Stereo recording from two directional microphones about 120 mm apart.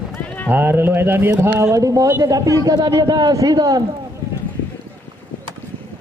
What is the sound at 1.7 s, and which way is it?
A man's voice, 30° right (ahead or behind).